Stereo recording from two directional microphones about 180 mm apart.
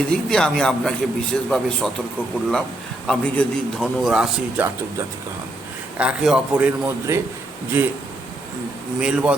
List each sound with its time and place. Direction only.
0.1 s a man's voice: 5° left (ahead or behind)
3.1 s a man's voice: centre (ahead or behind)
6.0 s a man's voice: 5° right (ahead or behind)
9.0 s a man's voice: 5° right (ahead or behind)